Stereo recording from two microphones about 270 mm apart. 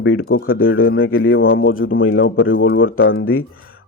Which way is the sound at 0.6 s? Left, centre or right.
Left.